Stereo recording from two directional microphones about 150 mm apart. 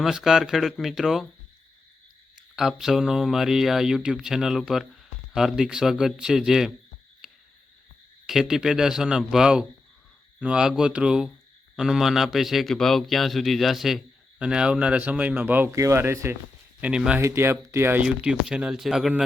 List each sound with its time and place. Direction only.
0.0 s speech: 5° right (ahead or behind)
2.6 s speech: centre (ahead or behind)
7.2 s a sound: centre (ahead or behind)
8.3 s speech: 5° right (ahead or behind); by 16.3 s 20° right (ahead or behind)
16.8 s speech: 5° right (ahead or behind)
17.2 s speech: 15° right (ahead or behind)